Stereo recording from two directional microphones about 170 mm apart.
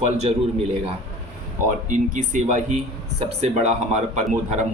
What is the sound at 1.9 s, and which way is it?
A man's voice, 50° right (ahead or behind).